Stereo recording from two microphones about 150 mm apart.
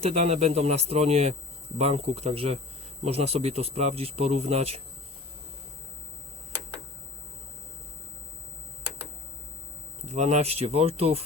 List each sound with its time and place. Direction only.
0.0 s speech: 45° right (ahead or behind)
10.1 s speech: 50° right (ahead or behind)